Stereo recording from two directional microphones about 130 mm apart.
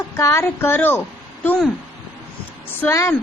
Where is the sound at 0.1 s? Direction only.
20° left (ahead or behind).